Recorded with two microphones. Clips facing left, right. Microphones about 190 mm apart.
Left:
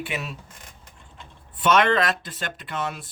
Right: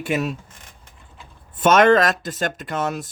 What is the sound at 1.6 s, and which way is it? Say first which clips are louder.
Speech: right 6 dB; 45° right (ahead or behind).